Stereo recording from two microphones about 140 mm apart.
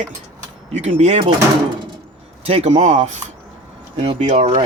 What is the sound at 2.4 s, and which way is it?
Speech, 50° right (ahead or behind).